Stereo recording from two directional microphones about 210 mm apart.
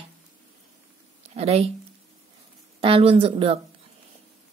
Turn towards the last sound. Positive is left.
turn(degrees=-25)  # may be behind; listen again after turning